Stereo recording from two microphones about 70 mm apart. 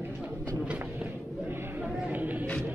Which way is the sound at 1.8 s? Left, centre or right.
Right.